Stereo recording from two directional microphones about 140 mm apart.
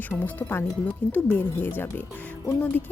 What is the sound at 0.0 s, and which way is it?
Speech, 10° left (ahead or behind).